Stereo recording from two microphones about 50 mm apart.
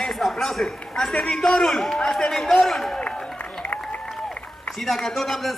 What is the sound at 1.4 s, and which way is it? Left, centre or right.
A man's voice, centre.